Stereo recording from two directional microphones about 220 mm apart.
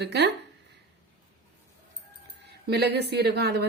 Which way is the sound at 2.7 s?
50° right (ahead or behind).